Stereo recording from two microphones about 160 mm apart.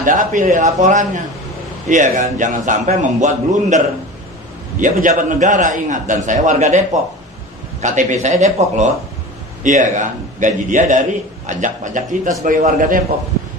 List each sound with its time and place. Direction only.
0.0 s a man's voice: 55° right (ahead or behind)
7.8 s a man's voice: 50° right (ahead or behind)